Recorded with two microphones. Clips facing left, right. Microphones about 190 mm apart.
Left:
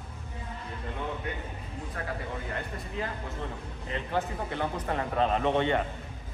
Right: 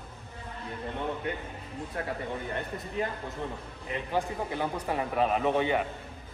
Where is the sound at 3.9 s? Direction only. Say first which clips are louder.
Right 1 dB; 10° right (ahead or behind).